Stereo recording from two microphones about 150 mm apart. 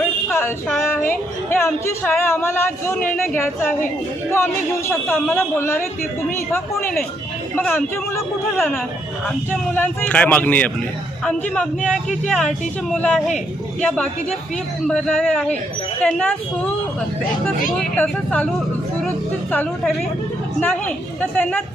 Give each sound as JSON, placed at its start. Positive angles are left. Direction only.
{"t": 1.1, "sound": "speech", "side_deg": 15}
{"t": 4.9, "sound": "speech", "side_deg": 15}
{"t": 7.5, "sound": "speech", "side_deg": 15}
{"t": 8.5, "sound": "speech", "side_deg": 5}
{"t": 17.9, "sound": "speech", "side_deg": 10}
{"t": 19.5, "sound": "speech", "side_deg": 5}